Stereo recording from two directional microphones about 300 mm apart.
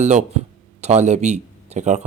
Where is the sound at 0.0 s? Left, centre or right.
Right.